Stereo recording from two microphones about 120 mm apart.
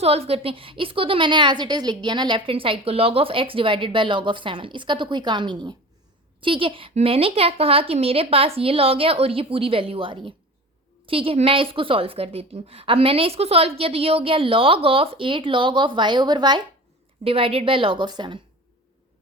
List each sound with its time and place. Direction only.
0.0 s a woman's voice: 55° right (ahead or behind); by 16.6 s 35° right (ahead or behind)
17.2 s a woman's voice: 50° right (ahead or behind)